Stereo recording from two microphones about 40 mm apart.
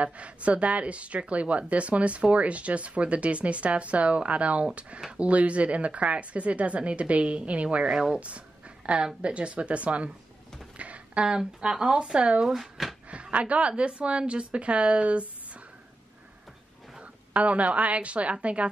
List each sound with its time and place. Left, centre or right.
0.0 s speech: right
7.8 s speech: centre
8.2 s speech: right
10.8 s a sound: right
11.2 s speech: centre
12.5 s speech: centre
13.1 s a woman's voice: right
17.0 s a woman's voice: right